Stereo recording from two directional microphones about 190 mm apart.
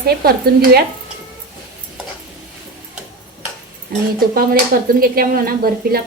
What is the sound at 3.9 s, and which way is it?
Speech, 50° right (ahead or behind).